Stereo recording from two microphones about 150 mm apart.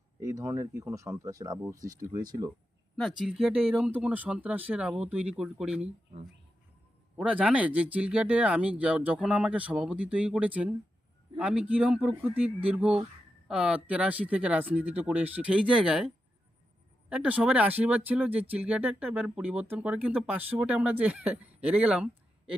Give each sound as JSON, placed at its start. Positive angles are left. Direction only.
{"t": 0.2, "sound": "speech", "side_deg": -20}
{"t": 2.9, "sound": "speech", "side_deg": 0}
{"t": 7.2, "sound": "speech", "side_deg": -5}